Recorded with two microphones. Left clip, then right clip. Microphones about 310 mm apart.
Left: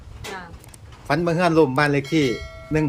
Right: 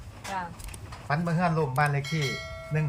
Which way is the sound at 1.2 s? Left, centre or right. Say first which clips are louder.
Left 12 dB; left.